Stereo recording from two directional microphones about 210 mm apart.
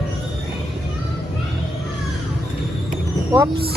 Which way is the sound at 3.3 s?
15° right (ahead or behind).